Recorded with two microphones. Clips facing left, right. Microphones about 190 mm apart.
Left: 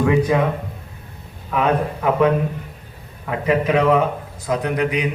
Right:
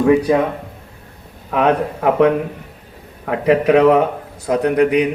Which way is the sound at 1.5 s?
65° right (ahead or behind).